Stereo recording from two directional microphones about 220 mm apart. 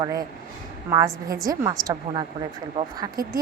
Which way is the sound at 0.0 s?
15° right (ahead or behind).